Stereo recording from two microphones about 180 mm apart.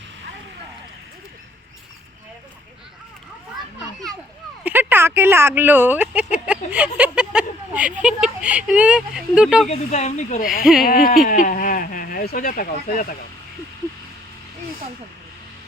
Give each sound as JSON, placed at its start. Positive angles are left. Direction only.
{"t": 4.6, "sound": "speech", "side_deg": -10}
{"t": 9.6, "sound": "speech", "side_deg": 40}
{"t": 10.6, "sound": "speech", "side_deg": -5}
{"t": 10.8, "sound": "speech", "side_deg": 55}